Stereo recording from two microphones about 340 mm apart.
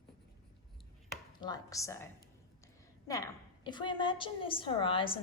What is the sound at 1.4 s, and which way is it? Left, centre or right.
Speech, centre.